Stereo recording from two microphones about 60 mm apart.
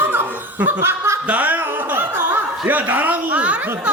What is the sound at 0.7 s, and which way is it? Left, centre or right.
Chuckle, right.